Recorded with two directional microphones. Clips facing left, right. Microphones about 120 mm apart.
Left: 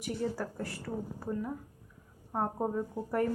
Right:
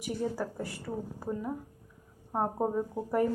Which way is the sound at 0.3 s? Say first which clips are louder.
Right 2 dB; 10° right (ahead or behind).